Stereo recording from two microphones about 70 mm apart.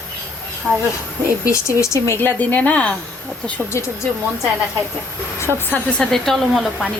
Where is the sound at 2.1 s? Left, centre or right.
Left.